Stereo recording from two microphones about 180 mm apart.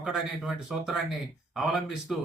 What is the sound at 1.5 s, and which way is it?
Speech, centre (ahead or behind).